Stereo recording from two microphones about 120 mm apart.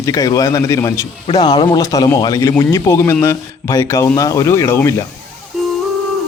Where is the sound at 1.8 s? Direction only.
30° left (ahead or behind).